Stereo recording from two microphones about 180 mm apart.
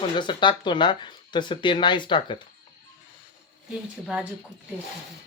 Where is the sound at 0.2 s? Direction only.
25° left (ahead or behind).